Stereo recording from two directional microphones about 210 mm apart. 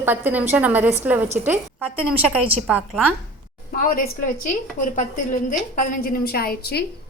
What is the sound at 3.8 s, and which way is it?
A woman's voice, 40° left (ahead or behind).